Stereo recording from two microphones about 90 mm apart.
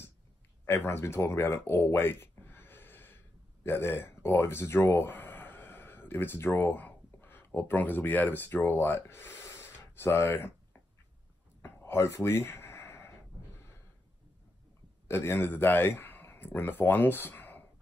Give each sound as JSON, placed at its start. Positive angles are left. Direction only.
{"t": 0.7, "sound": "speech", "side_deg": 25}
{"t": 11.6, "sound": "a sound", "side_deg": 30}
{"t": 15.0, "sound": "a man's voice", "side_deg": 25}